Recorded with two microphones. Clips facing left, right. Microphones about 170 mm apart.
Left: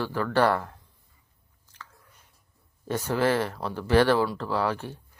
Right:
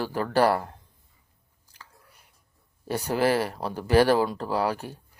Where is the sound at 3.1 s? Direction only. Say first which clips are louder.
Right 1 dB; 10° right (ahead or behind).